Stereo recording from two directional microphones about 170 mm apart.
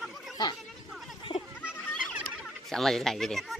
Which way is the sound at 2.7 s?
Centre (ahead or behind).